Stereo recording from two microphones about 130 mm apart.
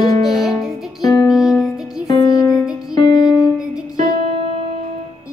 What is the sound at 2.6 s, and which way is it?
Music, 5° right (ahead or behind).